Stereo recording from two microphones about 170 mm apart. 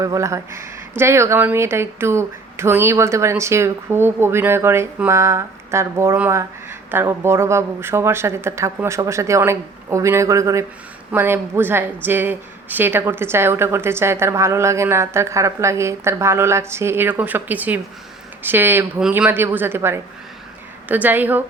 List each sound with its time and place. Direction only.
0.0 s speech: 20° right (ahead or behind)